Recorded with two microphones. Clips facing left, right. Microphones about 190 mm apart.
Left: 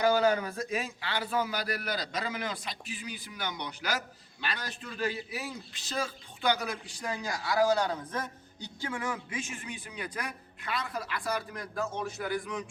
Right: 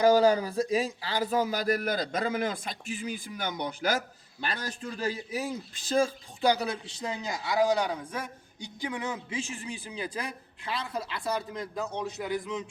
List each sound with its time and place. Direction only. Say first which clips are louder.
0.0 s a man's voice: right 4 dB; 35° right (ahead or behind)